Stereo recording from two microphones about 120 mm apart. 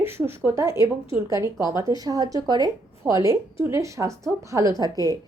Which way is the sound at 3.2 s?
20° right (ahead or behind).